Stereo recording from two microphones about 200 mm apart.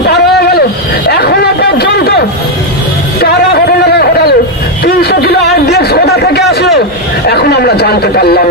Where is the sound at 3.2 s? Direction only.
55° left (ahead or behind).